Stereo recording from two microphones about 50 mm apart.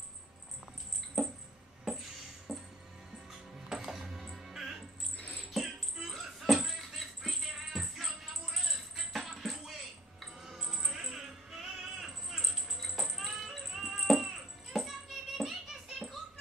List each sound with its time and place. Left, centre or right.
1.9 s music: centre
5.1 s music: left
5.5 s music: centre